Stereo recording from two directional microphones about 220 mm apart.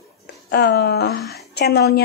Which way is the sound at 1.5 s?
45° left (ahead or behind).